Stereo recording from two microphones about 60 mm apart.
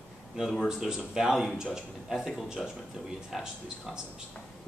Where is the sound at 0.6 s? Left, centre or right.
Centre.